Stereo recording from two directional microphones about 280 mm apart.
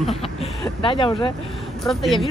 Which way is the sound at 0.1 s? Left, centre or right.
Left.